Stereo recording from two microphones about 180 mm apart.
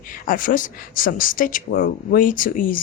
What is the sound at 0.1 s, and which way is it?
Speech, 50° left (ahead or behind).